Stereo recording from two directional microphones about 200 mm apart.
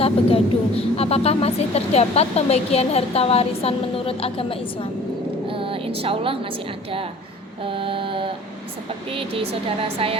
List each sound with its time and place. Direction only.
0.0 s a woman's voice: 30° left (ahead or behind)
5.5 s a woman's voice: 25° right (ahead or behind)